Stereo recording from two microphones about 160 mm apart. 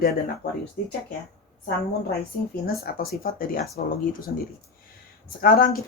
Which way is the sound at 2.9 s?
70° left (ahead or behind).